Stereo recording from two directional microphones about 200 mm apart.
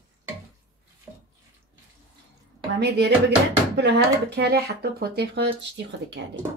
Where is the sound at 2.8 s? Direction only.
55° right (ahead or behind).